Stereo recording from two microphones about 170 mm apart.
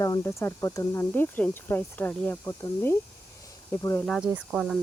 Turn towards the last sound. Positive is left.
turn(degrees=0)  # may be behind; listen again after turning